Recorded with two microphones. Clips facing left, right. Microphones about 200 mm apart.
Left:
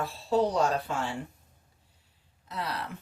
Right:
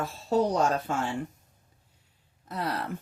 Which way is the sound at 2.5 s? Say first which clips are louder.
Right 3 dB; 50° right (ahead or behind).